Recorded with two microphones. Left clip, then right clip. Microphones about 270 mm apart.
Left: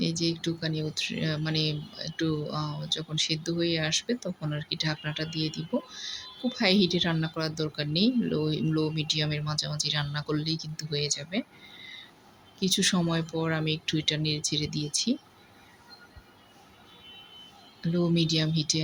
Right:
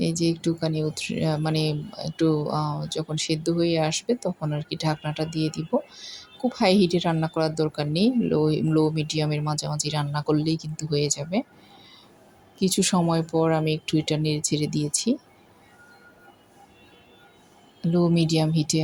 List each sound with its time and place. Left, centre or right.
0.0 s speech: centre
12.5 s speech: centre
17.9 s speech: centre